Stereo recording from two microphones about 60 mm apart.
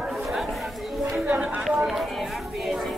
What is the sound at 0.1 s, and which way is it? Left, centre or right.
Chatter, centre.